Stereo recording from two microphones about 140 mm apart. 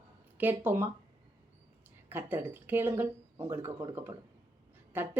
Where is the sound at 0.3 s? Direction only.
15° right (ahead or behind).